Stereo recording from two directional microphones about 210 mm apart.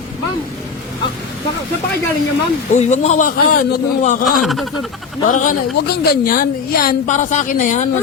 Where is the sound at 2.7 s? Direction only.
35° left (ahead or behind).